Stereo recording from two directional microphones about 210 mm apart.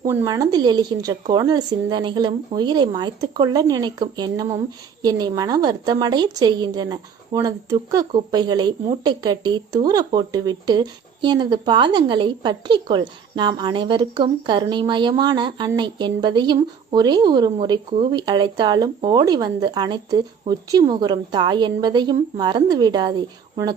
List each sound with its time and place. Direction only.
0.0 s speech: 15° right (ahead or behind)